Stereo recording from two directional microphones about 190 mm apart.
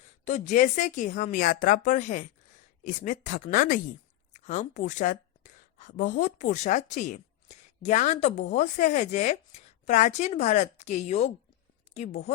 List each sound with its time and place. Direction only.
0.3 s a woman's voice: 40° left (ahead or behind)